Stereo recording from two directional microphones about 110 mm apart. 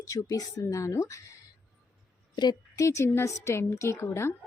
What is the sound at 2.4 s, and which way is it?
A woman's voice, 35° left (ahead or behind).